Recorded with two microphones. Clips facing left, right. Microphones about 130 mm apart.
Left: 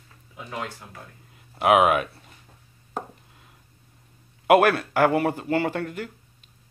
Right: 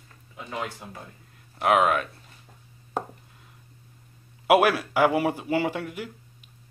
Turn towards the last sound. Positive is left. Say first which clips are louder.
# left 1 dB
turn(degrees=-10)  # may be behind; listen again after turning